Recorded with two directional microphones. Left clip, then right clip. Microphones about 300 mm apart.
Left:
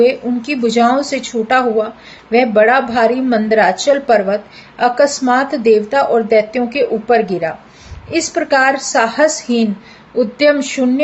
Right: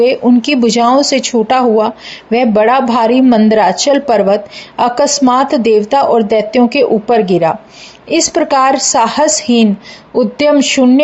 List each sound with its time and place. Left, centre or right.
0.0 s a woman's voice: right